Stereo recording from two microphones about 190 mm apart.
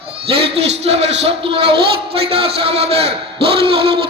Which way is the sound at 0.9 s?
35° right (ahead or behind).